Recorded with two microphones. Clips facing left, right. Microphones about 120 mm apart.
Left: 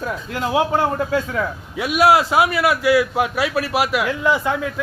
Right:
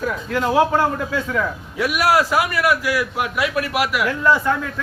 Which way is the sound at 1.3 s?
25° left (ahead or behind).